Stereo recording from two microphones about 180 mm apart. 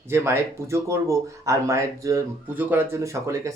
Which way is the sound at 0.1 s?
15° right (ahead or behind).